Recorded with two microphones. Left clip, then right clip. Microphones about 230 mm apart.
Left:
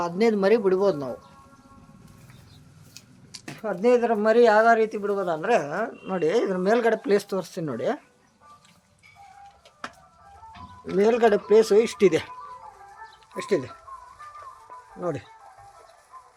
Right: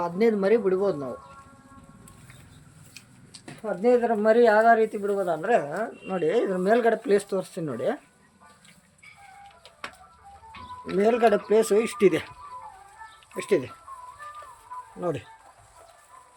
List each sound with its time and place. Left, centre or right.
0.0 s a man's voice: centre
2.9 s tick-tock: centre
3.8 s speech: centre
10.9 s speech: centre
13.3 s speech: centre